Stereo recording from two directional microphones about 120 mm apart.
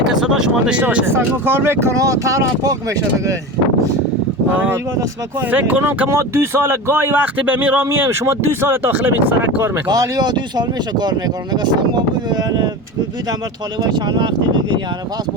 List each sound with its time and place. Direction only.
0.1 s speech: 5° right (ahead or behind); by 3.3 s 30° right (ahead or behind)
4.5 s speech: 15° right (ahead or behind)
9.8 s speech: 35° right (ahead or behind)
13.7 s speech: 35° right (ahead or behind)